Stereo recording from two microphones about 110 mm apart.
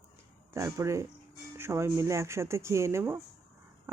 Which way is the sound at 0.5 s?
25° right (ahead or behind).